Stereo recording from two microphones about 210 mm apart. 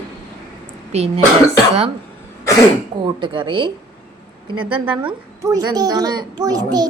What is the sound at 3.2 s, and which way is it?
A child's voice, 25° right (ahead or behind).